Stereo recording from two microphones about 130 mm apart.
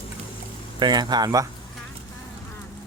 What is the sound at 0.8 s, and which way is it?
Speech, 35° right (ahead or behind).